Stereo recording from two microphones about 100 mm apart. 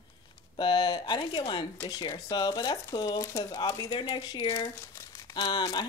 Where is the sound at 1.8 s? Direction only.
35° left (ahead or behind).